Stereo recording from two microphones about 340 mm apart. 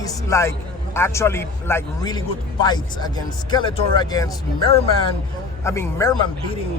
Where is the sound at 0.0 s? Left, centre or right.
Centre.